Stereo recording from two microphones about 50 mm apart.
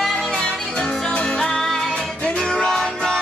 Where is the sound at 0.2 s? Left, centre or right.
Centre.